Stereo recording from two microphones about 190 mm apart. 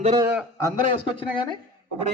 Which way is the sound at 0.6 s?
25° left (ahead or behind).